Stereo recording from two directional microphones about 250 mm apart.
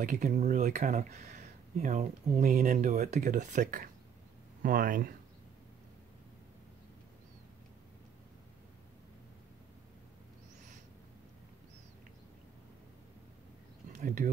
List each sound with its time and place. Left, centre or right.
0.0 s speech: right
13.9 s speech: right